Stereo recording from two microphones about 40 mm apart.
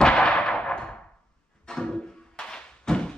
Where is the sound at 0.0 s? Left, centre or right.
Left.